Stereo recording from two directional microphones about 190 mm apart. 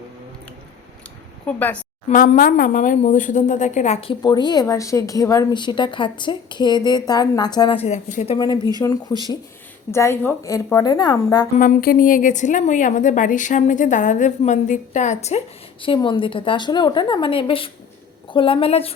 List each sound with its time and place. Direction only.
1.5 s a woman's voice: 10° left (ahead or behind)
2.0 s speech: 45° left (ahead or behind); by 7.9 s 25° left (ahead or behind)
7.9 s a woman's voice: 40° left (ahead or behind)
8.8 s a woman's voice: 20° left (ahead or behind)
11.5 s a woman's voice: 50° left (ahead or behind)
15.8 s speech: 25° left (ahead or behind)